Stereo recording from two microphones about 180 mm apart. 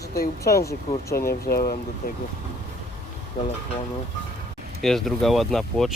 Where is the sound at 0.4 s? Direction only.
15° left (ahead or behind).